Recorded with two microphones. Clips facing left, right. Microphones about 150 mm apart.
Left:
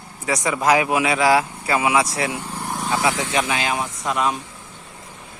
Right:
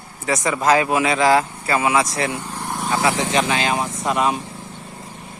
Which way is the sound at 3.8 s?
5° right (ahead or behind).